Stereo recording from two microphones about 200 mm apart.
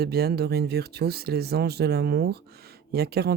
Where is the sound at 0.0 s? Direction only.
50° right (ahead or behind).